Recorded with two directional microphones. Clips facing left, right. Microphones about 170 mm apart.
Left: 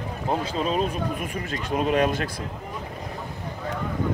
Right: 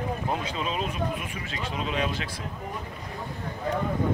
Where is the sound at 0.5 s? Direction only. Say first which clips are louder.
Left 5 dB; 40° left (ahead or behind).